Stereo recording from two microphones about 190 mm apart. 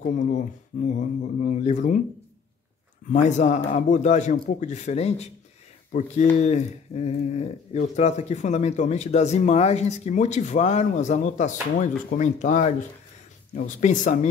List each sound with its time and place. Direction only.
0.0 s speech: 40° left (ahead or behind)
3.1 s speech: 40° left (ahead or behind)